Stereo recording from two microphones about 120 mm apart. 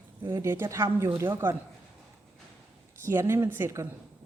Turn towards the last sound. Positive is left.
turn(degrees=-20)  # may be behind; listen again after turning